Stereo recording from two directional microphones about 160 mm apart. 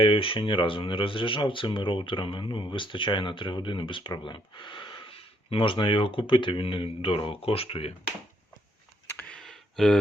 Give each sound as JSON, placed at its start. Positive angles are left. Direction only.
{"t": 0.0, "sound": "speech", "side_deg": 35}
{"t": 9.1, "sound": "clicking", "side_deg": 5}